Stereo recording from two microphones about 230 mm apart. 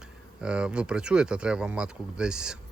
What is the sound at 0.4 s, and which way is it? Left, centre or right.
Speech, centre.